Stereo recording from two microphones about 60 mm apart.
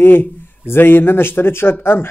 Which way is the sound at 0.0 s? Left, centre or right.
Left.